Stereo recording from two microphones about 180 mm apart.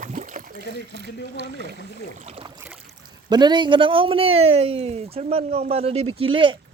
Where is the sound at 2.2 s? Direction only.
30° right (ahead or behind).